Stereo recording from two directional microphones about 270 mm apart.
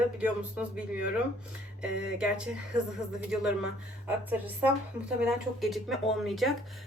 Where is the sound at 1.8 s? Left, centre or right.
Centre.